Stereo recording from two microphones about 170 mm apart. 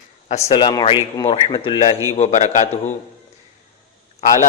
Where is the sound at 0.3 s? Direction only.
40° left (ahead or behind).